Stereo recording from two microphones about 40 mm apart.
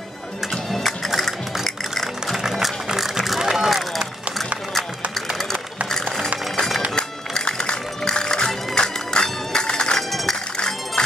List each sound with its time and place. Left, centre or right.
0.7 s music: centre
2.3 s music: centre
3.3 s a sound: centre
7.0 s music: centre
9.9 s music: centre
11.0 s music: left